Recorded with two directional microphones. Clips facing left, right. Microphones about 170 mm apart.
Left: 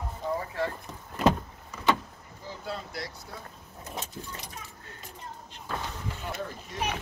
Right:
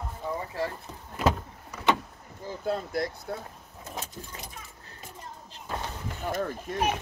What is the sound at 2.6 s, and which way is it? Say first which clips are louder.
Speech: right 9 dB; 50° right (ahead or behind).